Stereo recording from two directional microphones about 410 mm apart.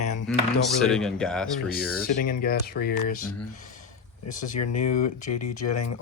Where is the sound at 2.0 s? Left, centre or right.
Left.